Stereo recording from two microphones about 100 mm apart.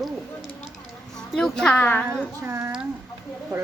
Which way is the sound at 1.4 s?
5° left (ahead or behind).